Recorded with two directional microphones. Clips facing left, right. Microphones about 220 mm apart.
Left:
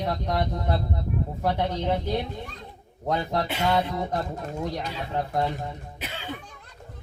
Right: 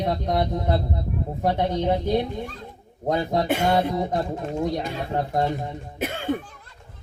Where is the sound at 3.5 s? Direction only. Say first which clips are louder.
Right 4 dB; 50° right (ahead or behind).